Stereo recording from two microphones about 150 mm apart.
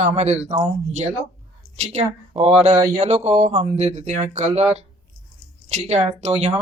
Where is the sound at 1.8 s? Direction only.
45° right (ahead or behind).